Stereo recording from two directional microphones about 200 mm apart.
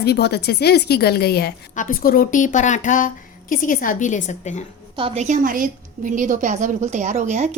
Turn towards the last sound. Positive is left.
turn(degrees=-35)  # may be behind; listen again after turning